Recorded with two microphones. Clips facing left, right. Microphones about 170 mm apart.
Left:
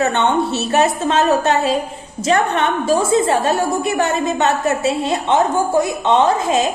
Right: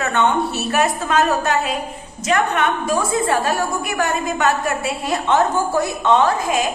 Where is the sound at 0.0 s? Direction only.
25° left (ahead or behind).